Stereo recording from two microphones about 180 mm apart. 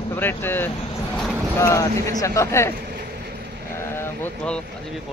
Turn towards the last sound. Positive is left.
turn(degrees=10)  # may be behind; listen again after turning